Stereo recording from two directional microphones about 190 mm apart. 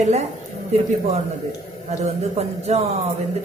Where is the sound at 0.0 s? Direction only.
35° right (ahead or behind).